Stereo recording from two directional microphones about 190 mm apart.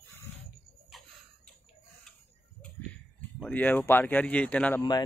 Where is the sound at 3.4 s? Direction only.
10° left (ahead or behind).